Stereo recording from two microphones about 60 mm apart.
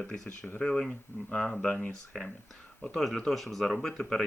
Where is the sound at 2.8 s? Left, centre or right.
Centre.